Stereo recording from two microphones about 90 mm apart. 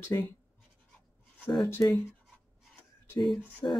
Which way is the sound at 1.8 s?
30° left (ahead or behind).